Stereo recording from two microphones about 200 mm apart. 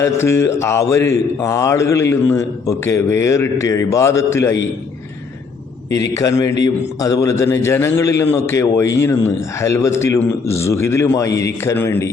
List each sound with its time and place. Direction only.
0.0 s speech: 15° left (ahead or behind)
5.9 s speech: 15° left (ahead or behind)